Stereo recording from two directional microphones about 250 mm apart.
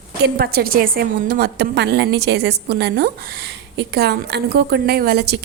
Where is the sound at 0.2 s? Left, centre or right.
Right.